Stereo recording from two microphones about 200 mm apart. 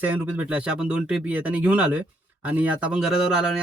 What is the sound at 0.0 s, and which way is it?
Speech, 10° right (ahead or behind).